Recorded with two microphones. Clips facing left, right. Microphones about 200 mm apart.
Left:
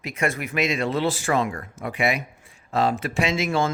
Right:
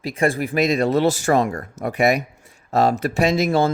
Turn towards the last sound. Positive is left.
turn(degrees=-35)  # may be behind; listen again after turning